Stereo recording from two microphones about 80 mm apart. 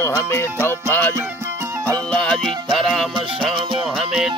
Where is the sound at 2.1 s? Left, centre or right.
Centre.